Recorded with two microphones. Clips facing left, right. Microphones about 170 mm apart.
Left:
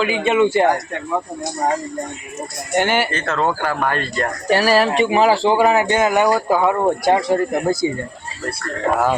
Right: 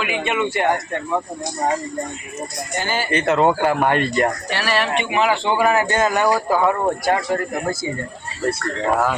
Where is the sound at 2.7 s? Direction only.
75° left (ahead or behind).